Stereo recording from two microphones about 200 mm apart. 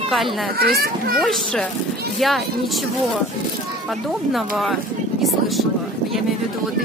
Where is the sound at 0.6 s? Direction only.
50° right (ahead or behind).